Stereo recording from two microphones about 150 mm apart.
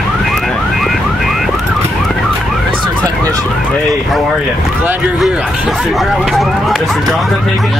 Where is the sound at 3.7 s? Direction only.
Centre (ahead or behind).